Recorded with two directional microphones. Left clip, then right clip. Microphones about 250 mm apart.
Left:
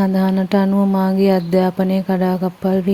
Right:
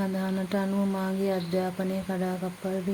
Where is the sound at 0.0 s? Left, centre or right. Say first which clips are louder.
Left 12 dB; left.